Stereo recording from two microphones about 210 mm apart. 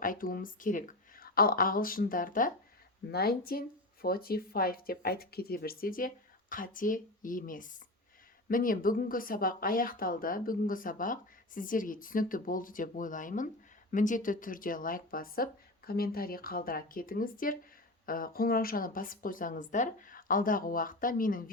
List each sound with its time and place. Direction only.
0.0 s speech: 40° left (ahead or behind)